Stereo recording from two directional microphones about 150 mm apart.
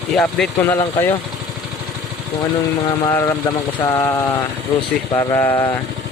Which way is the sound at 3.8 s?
20° left (ahead or behind).